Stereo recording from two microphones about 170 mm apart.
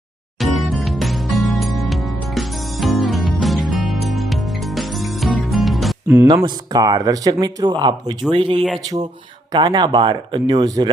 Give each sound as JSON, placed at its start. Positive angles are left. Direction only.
{"t": 0.3, "sound": "music", "side_deg": 0}
{"t": 6.2, "sound": "speech", "side_deg": -25}